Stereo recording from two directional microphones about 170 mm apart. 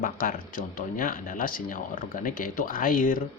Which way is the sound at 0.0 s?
55° left (ahead or behind).